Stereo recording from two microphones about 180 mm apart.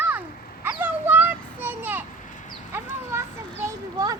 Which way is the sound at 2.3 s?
45° left (ahead or behind).